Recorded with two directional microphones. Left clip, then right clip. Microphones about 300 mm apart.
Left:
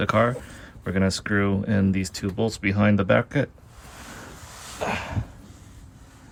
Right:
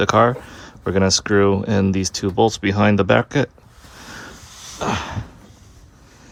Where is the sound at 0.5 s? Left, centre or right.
Centre.